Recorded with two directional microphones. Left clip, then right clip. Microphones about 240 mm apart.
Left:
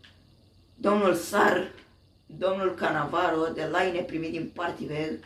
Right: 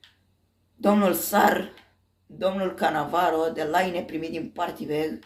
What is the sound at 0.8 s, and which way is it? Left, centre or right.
Speech, right.